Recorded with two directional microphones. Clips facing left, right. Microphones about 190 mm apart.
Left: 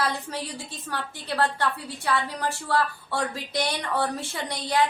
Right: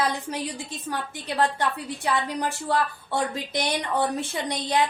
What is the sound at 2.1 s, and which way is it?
A woman's voice, 20° right (ahead or behind).